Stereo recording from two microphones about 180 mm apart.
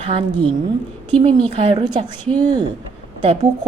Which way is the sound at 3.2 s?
30° right (ahead or behind).